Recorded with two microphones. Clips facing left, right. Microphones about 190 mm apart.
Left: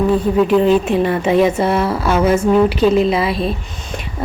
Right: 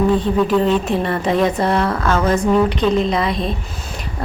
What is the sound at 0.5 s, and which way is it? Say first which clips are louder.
A woman's voice: left 3 dB; 5° left (ahead or behind).